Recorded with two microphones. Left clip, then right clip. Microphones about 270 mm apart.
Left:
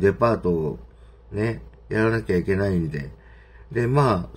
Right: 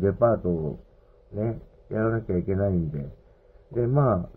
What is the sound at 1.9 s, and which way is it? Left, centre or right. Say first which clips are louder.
Speech: left 5 dB; left.